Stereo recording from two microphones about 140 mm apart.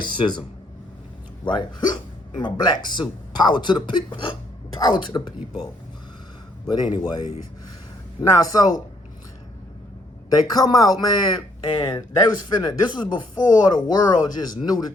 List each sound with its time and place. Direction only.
0.0 s speech: 35° left (ahead or behind)
1.5 s speech: 30° left (ahead or behind)
6.7 s speech: 30° left (ahead or behind)
8.2 s speech: 25° left (ahead or behind)
10.2 s speech: 30° left (ahead or behind)